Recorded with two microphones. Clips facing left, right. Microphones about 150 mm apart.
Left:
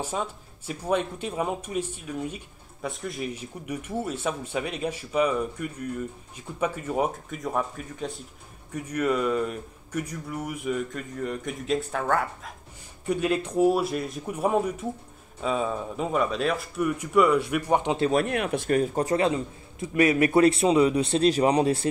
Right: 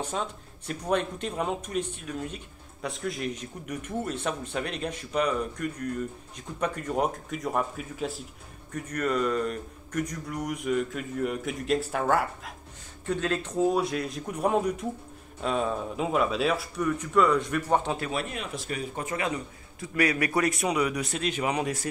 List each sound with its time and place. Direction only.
0.0 s speech: 5° left (ahead or behind)
8.7 s speech: 10° left (ahead or behind); by 12.5 s 5° right (ahead or behind)
13.0 s speech: 10° left (ahead or behind)
16.8 s speech: 10° left (ahead or behind)
18.1 s speech: 60° left (ahead or behind)
19.0 s a man's voice: 30° left (ahead or behind)